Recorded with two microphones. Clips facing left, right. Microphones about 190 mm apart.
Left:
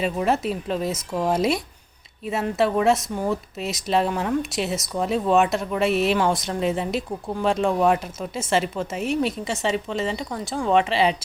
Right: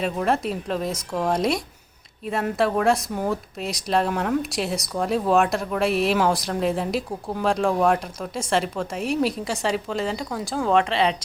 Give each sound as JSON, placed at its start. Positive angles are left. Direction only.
{"t": 0.0, "sound": "speech", "side_deg": 0}